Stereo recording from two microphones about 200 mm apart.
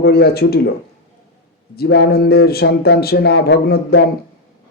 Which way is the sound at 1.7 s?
55° left (ahead or behind).